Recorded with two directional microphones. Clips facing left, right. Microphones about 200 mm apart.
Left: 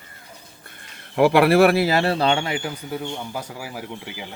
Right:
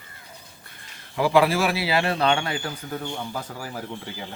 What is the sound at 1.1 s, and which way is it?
Speech, 65° left (ahead or behind).